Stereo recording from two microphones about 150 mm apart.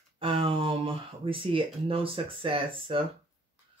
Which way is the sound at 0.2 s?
35° right (ahead or behind).